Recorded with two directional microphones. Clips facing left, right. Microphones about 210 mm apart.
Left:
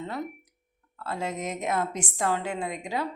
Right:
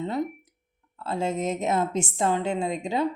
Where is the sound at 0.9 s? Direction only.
25° right (ahead or behind).